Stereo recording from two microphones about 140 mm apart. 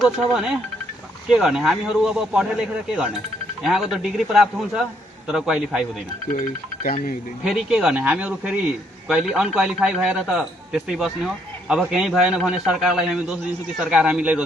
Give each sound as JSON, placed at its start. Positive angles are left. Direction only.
{"t": 0.0, "sound": "a man's voice", "side_deg": -5}
{"t": 6.8, "sound": "speech", "side_deg": 90}
{"t": 7.4, "sound": "a man's voice", "side_deg": -5}